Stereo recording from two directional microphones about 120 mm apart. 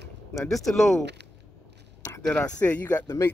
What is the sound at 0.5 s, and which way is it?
Speech, centre (ahead or behind).